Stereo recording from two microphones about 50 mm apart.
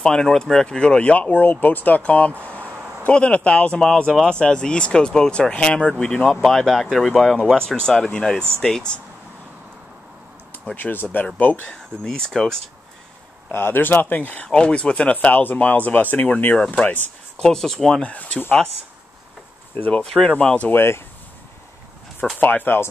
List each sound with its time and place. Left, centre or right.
0.0 s speech: centre; by 2.3 s left
2.4 s a sound: left
3.1 s speech: left
6.4 s speech: centre
10.8 s speech: left
12.0 s speech: centre
13.5 s speech: left
14.5 s speech: centre
16.5 s speech: centre
18.0 s speech: left
19.9 s speech: centre
20.7 s speech: left
22.4 s speech: left